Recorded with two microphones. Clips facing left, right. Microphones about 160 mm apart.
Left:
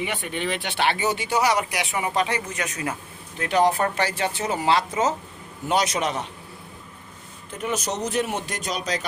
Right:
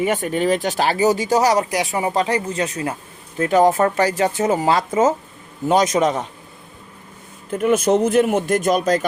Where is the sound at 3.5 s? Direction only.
45° right (ahead or behind).